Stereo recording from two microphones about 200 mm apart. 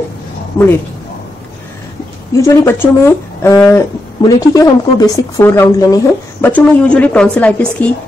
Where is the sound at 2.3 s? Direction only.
15° left (ahead or behind).